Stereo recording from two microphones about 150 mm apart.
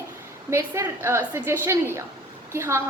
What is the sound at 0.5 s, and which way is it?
A woman's voice, 15° right (ahead or behind).